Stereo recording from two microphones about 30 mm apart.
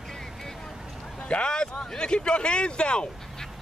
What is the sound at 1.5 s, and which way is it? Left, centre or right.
A man's voice, left.